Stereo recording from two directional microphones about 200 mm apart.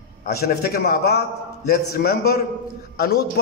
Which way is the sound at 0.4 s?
50° left (ahead or behind).